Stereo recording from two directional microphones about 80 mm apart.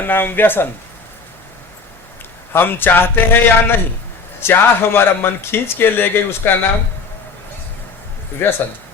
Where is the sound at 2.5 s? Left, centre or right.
Left.